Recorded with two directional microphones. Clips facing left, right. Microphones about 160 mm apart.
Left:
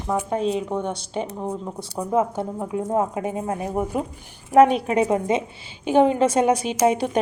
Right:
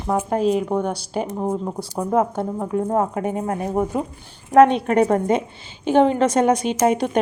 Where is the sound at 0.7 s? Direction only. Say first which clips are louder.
Right 3 dB; 35° right (ahead or behind).